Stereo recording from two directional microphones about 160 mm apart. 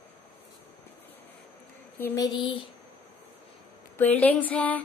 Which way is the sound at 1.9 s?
20° left (ahead or behind).